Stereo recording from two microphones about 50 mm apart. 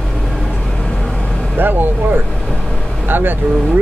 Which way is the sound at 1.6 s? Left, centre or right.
Right.